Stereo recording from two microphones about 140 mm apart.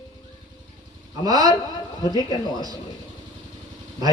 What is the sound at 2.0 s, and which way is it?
Speech, 25° left (ahead or behind).